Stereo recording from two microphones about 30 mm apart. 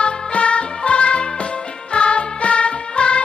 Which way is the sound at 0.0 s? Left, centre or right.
Left.